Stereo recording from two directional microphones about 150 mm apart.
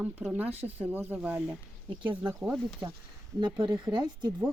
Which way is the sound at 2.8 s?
20° right (ahead or behind).